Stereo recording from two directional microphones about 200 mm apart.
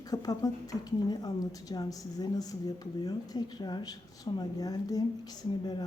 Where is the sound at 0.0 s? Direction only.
20° left (ahead or behind).